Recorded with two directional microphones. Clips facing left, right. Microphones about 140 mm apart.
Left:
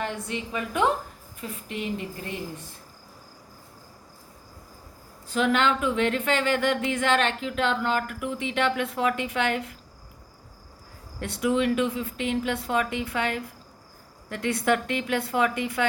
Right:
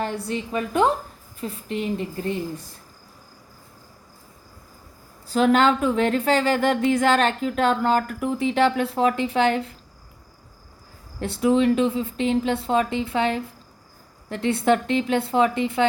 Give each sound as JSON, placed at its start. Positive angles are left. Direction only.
{"t": 0.0, "sound": "speech", "side_deg": -35}
{"t": 5.3, "sound": "speech", "side_deg": -35}
{"t": 11.2, "sound": "speech", "side_deg": -30}